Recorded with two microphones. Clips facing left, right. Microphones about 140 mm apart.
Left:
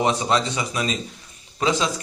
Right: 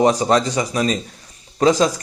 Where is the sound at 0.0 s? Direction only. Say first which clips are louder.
Right 6 dB; 40° right (ahead or behind).